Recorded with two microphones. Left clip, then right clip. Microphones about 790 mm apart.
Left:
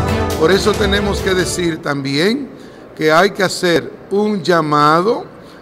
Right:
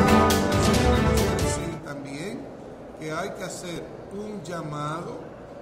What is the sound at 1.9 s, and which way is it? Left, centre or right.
A man's voice, left.